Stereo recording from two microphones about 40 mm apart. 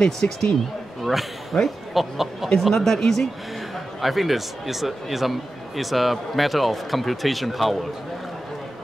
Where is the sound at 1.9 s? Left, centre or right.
Centre.